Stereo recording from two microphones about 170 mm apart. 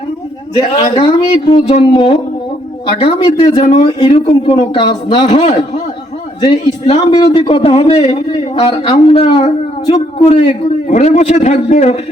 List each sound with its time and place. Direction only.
0.5 s a man's voice: 30° left (ahead or behind)